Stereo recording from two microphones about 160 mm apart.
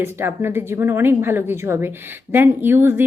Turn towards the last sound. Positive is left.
turn(degrees=-15)  # may be behind; listen again after turning